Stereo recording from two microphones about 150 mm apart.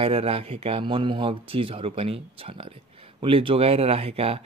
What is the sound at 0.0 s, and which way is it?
Speech, 40° right (ahead or behind).